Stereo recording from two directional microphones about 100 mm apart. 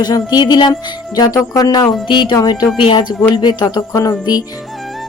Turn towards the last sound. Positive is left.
turn(degrees=40)  # may be behind; listen again after turning